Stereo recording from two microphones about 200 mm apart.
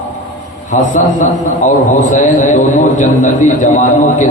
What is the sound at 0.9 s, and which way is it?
A man's voice, 40° left (ahead or behind).